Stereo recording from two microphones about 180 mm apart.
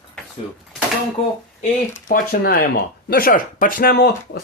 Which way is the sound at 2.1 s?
60° left (ahead or behind).